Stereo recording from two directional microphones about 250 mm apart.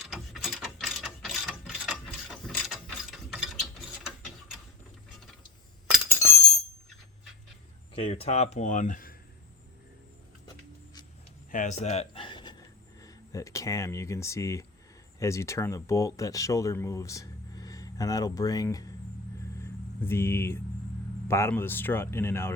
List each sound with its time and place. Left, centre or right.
0.0 s ratchet: centre
7.9 s speech: left
11.5 s a sound: left; by 14.7 s centre
15.2 s speech: centre
19.5 s vehicle: centre
21.2 s speech: centre